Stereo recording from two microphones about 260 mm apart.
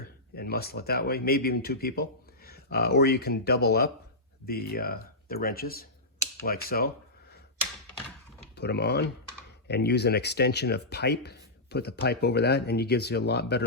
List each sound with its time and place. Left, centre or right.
0.3 s speech: left
8.5 s speech: left